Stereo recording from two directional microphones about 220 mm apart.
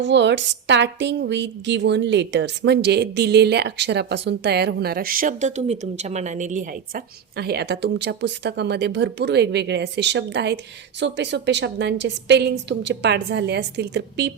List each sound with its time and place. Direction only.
0.0 s a woman's voice: 55° right (ahead or behind)